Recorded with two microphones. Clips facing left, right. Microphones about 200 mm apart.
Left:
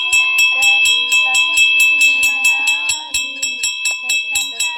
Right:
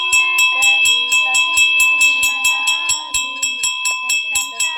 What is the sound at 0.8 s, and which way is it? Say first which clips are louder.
Music: even; 50° right (ahead or behind).